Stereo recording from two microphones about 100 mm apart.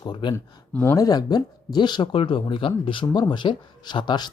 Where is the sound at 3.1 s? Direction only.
45° left (ahead or behind).